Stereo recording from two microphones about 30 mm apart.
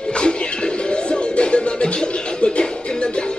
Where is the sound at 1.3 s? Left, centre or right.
Left.